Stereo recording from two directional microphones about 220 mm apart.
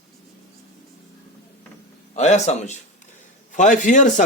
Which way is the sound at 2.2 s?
30° left (ahead or behind).